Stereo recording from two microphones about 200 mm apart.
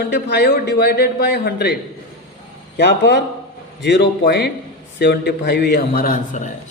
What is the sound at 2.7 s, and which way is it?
A man's voice, 60° left (ahead or behind).